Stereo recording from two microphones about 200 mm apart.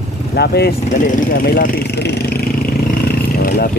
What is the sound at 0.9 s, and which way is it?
Speech, 40° left (ahead or behind).